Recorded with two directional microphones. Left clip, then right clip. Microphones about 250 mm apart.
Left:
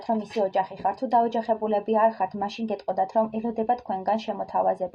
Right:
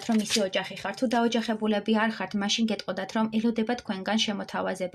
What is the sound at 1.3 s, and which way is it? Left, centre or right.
Speech, right.